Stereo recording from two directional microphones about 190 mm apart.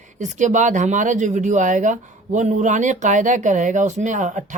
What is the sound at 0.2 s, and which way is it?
Speech, 40° right (ahead or behind).